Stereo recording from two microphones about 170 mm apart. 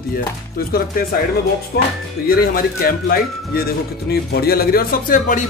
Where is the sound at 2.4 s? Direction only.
60° left (ahead or behind).